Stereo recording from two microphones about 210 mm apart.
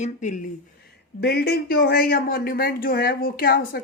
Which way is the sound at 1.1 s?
50° left (ahead or behind).